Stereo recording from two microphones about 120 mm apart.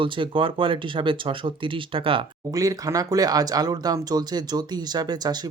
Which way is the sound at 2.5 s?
30° right (ahead or behind).